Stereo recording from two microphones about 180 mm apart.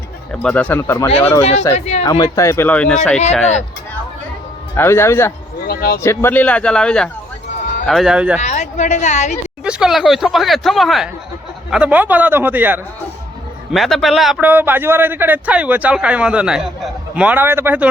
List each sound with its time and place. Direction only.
0.4 s speech: 5° left (ahead or behind)
1.4 s speech: 35° left (ahead or behind)
2.0 s speech: 20° left (ahead or behind); by 3.2 s 5° left (ahead or behind)
4.8 s speech: 15° left (ahead or behind)
5.6 s a sound: 60° left (ahead or behind)
6.0 s speech: 15° left (ahead or behind); by 8.4 s 5° right (ahead or behind)
8.4 s a woman's voice: 40° left (ahead or behind)
9.6 s a man's voice: 5° right (ahead or behind)
13.7 s a man's voice: centre (ahead or behind)